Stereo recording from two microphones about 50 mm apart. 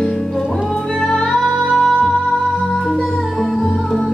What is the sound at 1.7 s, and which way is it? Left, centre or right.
Music, centre.